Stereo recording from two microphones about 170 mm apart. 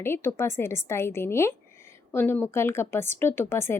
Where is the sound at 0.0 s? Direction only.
15° left (ahead or behind).